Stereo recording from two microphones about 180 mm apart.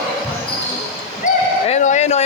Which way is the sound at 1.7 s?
40° left (ahead or behind).